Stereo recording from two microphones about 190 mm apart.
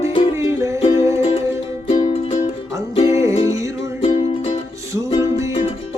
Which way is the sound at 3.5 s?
15° right (ahead or behind).